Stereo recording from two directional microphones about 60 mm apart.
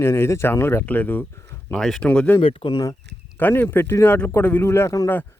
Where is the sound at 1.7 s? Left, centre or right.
Centre.